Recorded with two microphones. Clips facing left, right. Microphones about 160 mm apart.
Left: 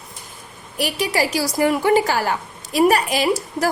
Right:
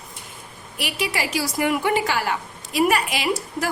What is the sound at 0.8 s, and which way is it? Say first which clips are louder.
A woman's voice: left 5 dB; 40° left (ahead or behind).